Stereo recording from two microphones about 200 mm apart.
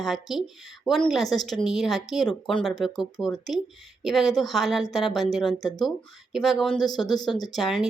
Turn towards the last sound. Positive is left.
turn(degrees=0)  # may be behind; listen again after turning